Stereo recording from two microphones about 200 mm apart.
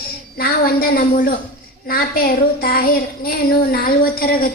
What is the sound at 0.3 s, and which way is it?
A woman's voice, 50° left (ahead or behind).